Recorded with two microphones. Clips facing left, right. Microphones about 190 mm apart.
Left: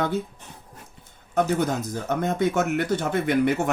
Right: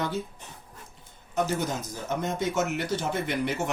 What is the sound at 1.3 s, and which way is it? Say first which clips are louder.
Speech: left 5 dB; 60° left (ahead or behind).